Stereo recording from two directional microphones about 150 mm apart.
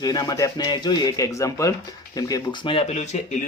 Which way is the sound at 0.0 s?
25° left (ahead or behind).